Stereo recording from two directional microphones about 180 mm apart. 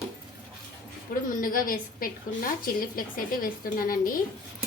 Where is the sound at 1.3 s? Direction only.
50° left (ahead or behind).